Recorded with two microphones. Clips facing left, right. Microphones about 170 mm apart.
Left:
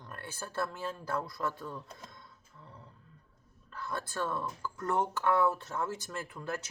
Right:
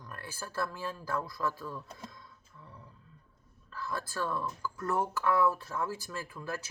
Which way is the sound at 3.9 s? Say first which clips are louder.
Even; 25° left (ahead or behind).